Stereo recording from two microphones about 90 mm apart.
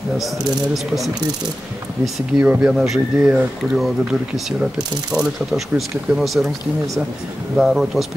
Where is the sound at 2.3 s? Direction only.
15° right (ahead or behind).